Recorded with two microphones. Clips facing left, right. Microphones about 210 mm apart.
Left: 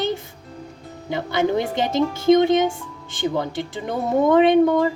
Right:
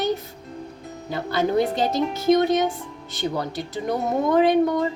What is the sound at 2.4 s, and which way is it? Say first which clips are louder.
Speech: left 3 dB; 25° left (ahead or behind).